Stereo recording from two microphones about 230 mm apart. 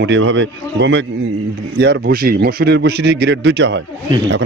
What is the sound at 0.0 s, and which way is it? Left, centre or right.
Speech, right.